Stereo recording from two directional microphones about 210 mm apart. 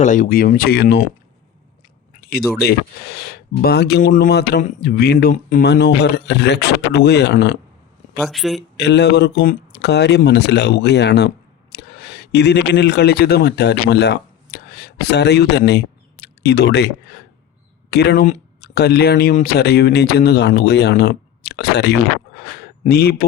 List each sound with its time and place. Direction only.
0.0 s speech: 35° left (ahead or behind)
2.3 s speech: 50° left (ahead or behind)
5.6 s speech: 55° left (ahead or behind)
8.2 s speech: centre (ahead or behind)
8.8 s speech: 55° left (ahead or behind)